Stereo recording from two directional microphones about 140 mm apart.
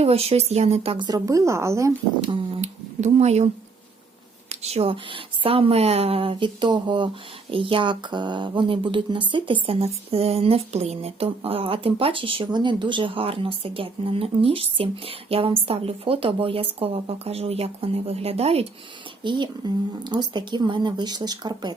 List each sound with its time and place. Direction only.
0.0 s speech: 45° right (ahead or behind); by 2.0 s 20° right (ahead or behind)
2.3 s speech: 50° right (ahead or behind)
4.6 s speech: 45° right (ahead or behind)
19.2 s speech: 35° right (ahead or behind)